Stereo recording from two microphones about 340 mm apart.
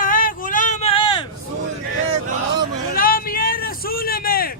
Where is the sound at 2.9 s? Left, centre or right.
Left.